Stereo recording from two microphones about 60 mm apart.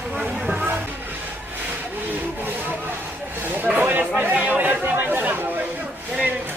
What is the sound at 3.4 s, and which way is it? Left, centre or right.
Chatter, right.